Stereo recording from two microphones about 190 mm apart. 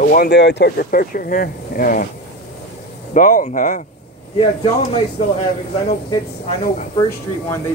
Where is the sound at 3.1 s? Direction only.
45° left (ahead or behind).